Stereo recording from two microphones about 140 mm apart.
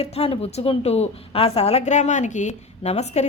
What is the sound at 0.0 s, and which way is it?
A woman's voice, 45° left (ahead or behind).